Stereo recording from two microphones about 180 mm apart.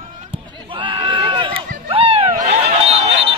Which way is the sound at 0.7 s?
30° right (ahead or behind).